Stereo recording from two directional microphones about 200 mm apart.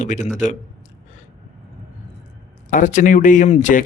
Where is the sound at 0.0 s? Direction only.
35° left (ahead or behind).